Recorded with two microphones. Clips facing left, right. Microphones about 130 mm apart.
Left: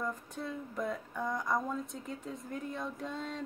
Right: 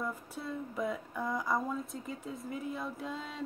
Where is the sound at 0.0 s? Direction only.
5° right (ahead or behind).